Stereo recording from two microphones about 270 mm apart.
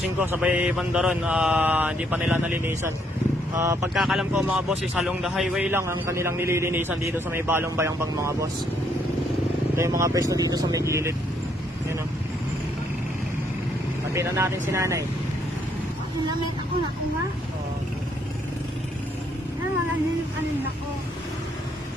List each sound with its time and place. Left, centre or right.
0.2 s mantra: centre
3.5 s speech: centre
9.7 s speech: centre
14.1 s speech: centre